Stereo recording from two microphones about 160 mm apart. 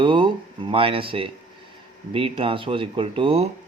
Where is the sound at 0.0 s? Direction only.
30° right (ahead or behind).